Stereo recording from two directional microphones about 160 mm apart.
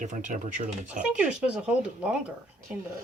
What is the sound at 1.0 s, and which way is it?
Speech, 5° right (ahead or behind).